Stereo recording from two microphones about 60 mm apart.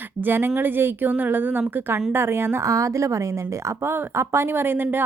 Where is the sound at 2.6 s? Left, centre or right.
Right.